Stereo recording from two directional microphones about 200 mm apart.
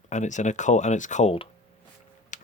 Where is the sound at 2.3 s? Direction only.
40° left (ahead or behind).